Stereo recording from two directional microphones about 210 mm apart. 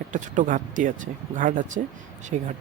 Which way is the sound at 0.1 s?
40° right (ahead or behind).